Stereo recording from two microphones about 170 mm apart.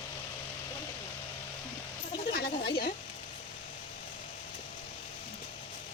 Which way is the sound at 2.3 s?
65° left (ahead or behind).